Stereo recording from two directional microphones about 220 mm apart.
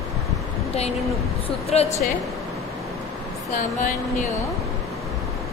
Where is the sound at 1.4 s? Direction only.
30° left (ahead or behind).